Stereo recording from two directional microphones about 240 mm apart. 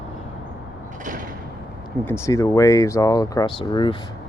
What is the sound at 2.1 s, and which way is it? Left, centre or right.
Speech, centre.